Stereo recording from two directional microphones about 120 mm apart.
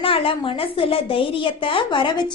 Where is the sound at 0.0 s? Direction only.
50° left (ahead or behind).